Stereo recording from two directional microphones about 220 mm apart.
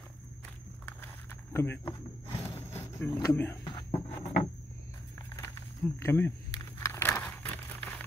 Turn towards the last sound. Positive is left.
turn(degrees=10)  # may be behind; listen again after turning